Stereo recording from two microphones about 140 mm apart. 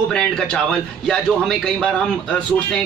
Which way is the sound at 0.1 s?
5° left (ahead or behind).